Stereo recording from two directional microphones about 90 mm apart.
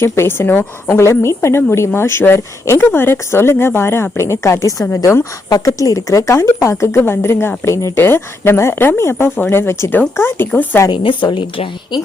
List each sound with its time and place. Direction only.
0.0 s speech: 30° left (ahead or behind)
5.5 s speech: 45° left (ahead or behind); by 10.8 s 20° left (ahead or behind)
10.8 s a woman's voice: 65° left (ahead or behind)